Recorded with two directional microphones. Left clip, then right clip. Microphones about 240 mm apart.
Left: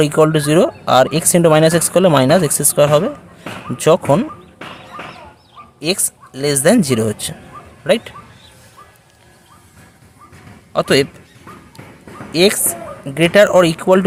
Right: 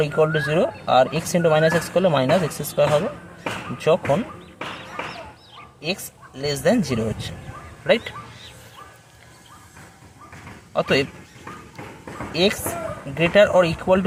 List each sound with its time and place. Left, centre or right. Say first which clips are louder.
0.0 s speech: left 7 dB; left
5.8 s speech: left 8 dB; left
10.7 s a man's voice: left 6 dB; left
12.3 s speech: left 7 dB; left